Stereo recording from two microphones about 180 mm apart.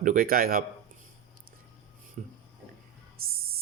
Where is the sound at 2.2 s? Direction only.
50° right (ahead or behind).